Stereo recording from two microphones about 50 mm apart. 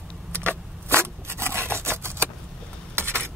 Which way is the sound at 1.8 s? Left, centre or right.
Right.